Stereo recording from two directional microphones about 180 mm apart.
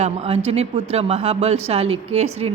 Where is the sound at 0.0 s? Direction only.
35° right (ahead or behind).